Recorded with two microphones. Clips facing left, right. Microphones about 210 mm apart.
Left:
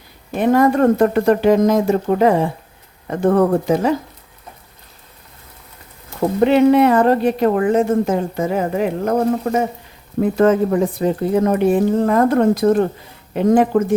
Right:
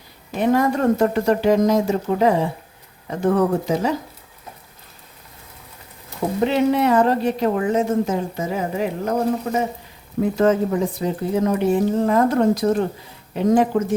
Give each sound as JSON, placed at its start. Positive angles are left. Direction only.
{"t": 0.5, "sound": "a woman's voice", "side_deg": 55}
{"t": 6.4, "sound": "a woman's voice", "side_deg": 55}